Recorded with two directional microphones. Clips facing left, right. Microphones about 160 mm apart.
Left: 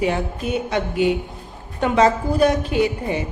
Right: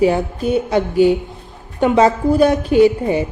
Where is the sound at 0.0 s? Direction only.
30° right (ahead or behind).